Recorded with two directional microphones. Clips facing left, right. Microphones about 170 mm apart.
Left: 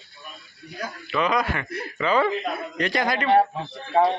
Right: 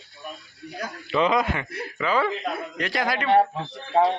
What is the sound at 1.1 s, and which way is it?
Speech, 25° right (ahead or behind).